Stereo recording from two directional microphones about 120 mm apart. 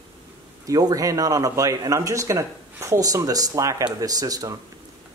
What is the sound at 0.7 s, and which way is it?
Speech, 30° right (ahead or behind).